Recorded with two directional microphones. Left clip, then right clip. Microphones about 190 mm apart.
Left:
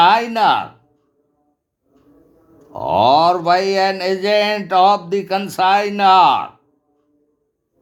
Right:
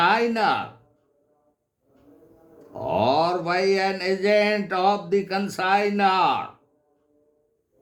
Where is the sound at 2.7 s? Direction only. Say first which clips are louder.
Left 9 dB; 40° left (ahead or behind).